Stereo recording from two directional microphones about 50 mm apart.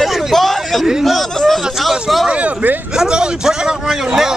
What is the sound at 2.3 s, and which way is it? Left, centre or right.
Speech, right.